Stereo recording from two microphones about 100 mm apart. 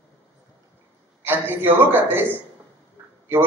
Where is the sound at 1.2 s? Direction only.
20° right (ahead or behind).